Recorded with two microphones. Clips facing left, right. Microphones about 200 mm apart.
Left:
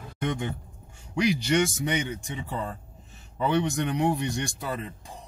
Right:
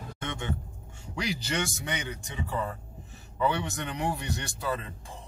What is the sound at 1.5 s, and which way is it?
Speech, 20° left (ahead or behind).